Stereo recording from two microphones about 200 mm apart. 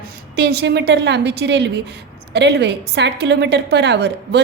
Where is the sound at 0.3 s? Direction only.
55° right (ahead or behind).